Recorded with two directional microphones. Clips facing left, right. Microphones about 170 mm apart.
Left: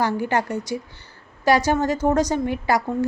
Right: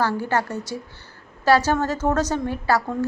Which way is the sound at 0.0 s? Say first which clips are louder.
Left 1 dB; 15° left (ahead or behind).